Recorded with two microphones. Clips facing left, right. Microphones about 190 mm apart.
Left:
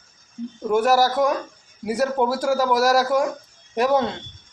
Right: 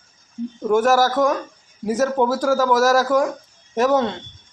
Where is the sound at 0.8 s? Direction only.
45° right (ahead or behind).